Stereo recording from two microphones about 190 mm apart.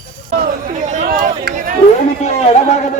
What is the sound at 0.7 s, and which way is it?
Chatter, 40° right (ahead or behind).